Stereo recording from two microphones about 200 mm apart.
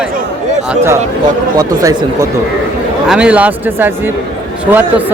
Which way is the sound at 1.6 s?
15° right (ahead or behind).